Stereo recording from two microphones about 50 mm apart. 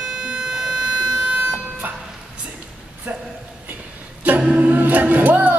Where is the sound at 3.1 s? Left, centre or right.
Right.